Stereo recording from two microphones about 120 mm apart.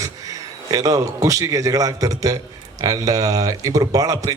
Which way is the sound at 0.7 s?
30° right (ahead or behind).